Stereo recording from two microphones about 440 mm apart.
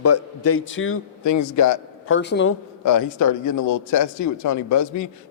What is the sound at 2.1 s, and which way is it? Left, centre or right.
Speech, left.